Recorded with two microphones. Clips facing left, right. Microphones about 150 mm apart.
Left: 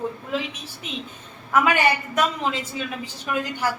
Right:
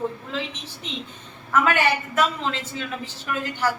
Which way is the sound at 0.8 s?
10° left (ahead or behind).